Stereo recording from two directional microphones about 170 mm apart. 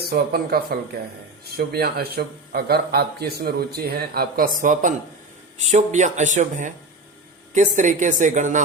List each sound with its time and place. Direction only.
0.1 s a man's voice: 60° right (ahead or behind); by 8.6 s 45° right (ahead or behind)